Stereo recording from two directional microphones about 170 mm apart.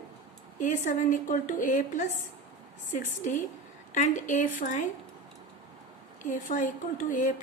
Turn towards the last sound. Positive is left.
turn(degrees=50)  # may be behind; listen again after turning